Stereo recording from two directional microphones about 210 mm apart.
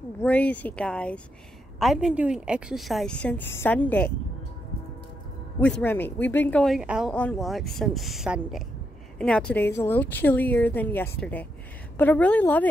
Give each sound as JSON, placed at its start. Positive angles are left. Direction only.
{"t": 0.2, "sound": "speech", "side_deg": 5}
{"t": 5.6, "sound": "speech", "side_deg": 5}